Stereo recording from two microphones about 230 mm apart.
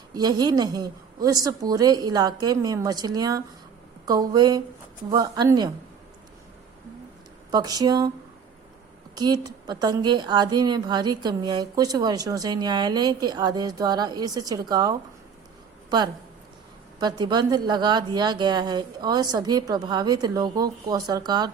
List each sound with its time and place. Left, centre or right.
0.1 s a woman's voice: centre
7.5 s a woman's voice: centre
9.1 s a woman's voice: centre
17.0 s a woman's voice: centre